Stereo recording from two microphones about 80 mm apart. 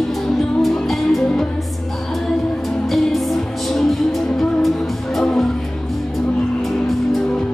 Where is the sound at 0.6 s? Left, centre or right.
Centre.